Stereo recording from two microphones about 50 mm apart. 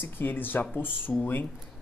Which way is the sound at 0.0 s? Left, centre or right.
Left.